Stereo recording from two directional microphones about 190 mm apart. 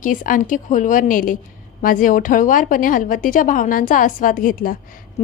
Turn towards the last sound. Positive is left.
turn(degrees=45)  # may be behind; listen again after turning